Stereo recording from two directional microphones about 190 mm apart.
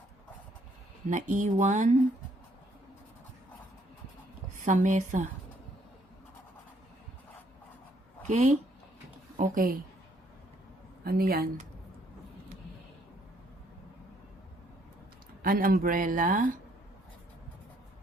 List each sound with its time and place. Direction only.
1.1 s speech: 40° right (ahead or behind)
4.6 s speech: 40° right (ahead or behind)
8.3 s speech: 40° right (ahead or behind)
11.0 s speech: 50° right (ahead or behind)
15.4 s speech: 50° right (ahead or behind)